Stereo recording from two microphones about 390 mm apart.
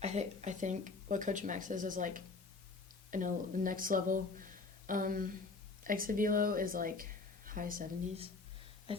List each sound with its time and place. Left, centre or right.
0.0 s speech: centre